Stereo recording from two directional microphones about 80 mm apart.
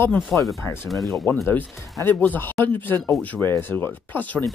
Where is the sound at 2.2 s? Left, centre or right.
Left.